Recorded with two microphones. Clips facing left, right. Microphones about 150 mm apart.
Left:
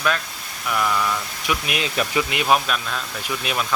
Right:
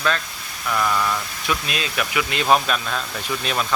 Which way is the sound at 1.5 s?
20° left (ahead or behind).